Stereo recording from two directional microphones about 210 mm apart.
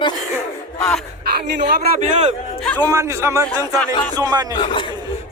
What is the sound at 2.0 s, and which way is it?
Speech, 35° right (ahead or behind).